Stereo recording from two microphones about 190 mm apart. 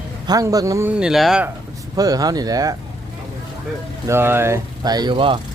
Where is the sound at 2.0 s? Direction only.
20° right (ahead or behind).